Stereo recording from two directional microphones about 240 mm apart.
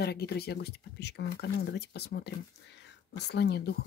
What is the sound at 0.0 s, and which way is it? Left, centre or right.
Speech, left.